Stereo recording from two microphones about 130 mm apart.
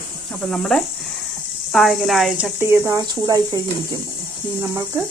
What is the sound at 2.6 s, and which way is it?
Speech, 20° right (ahead or behind).